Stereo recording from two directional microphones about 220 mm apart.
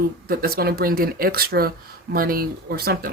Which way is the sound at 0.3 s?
45° right (ahead or behind).